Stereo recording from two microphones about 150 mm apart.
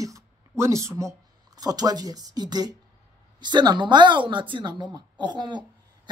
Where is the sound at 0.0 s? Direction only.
20° right (ahead or behind).